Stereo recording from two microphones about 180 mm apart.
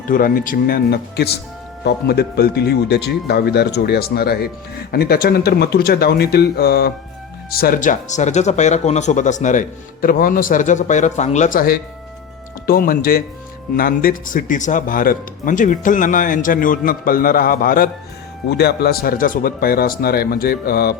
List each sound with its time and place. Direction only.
0.1 s speech: 50° left (ahead or behind)
18.4 s speech: 65° left (ahead or behind)